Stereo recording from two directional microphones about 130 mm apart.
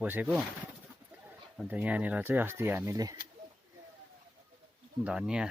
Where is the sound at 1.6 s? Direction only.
10° right (ahead or behind); by 3.2 s 25° right (ahead or behind).